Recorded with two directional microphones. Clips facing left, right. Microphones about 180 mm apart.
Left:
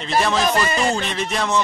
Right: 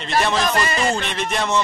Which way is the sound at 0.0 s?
Centre (ahead or behind).